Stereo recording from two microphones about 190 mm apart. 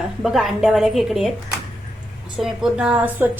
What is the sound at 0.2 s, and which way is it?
A woman's voice, centre (ahead or behind).